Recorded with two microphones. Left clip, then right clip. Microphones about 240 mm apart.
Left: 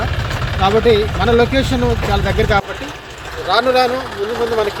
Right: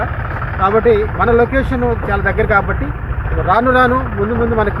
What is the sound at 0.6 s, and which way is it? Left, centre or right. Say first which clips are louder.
Speech: right 1 dB; centre.